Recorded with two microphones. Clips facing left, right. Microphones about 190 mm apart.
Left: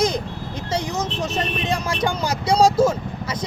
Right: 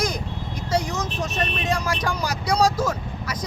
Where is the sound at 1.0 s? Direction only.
30° left (ahead or behind).